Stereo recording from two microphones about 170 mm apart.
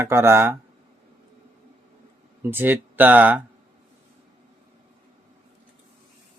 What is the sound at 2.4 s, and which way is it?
Speech, 10° right (ahead or behind).